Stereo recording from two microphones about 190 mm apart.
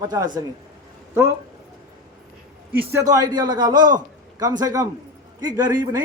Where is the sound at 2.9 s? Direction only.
20° right (ahead or behind).